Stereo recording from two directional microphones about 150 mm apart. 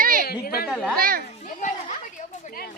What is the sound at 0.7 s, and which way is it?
Speech, 5° left (ahead or behind).